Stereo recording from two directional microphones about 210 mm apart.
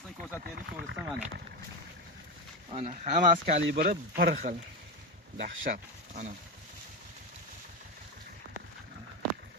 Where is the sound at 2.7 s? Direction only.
30° right (ahead or behind).